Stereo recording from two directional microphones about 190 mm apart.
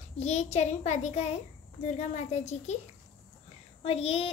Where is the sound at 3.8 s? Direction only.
30° left (ahead or behind).